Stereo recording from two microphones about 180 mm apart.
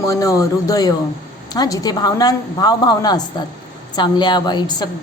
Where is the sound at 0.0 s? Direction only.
20° left (ahead or behind).